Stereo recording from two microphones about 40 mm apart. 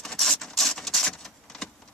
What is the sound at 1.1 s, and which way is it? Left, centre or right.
Vehicle, centre.